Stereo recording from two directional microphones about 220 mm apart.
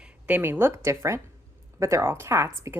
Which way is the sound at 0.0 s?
5° right (ahead or behind).